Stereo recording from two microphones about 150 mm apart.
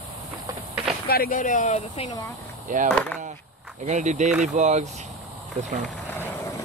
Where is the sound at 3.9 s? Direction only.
50° right (ahead or behind).